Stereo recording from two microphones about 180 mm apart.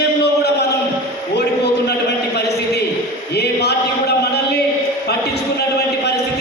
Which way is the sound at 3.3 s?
65° left (ahead or behind).